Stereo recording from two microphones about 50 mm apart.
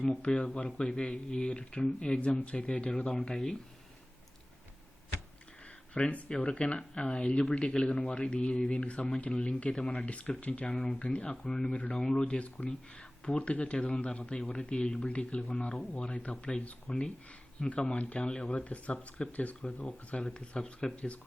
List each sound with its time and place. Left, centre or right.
0.2 s speech: left
5.9 s speech: left
10.1 s speech: left
10.7 s speech: centre